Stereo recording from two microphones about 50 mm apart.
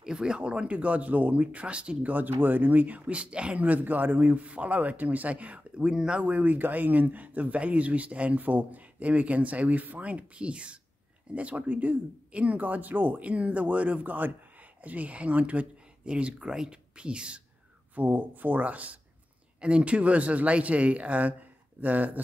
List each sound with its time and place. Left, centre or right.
0.0 s speech: centre
2.1 s speech: right
3.6 s speech: right; by 6.2 s centre
6.2 s speech: right
17.9 s speech: right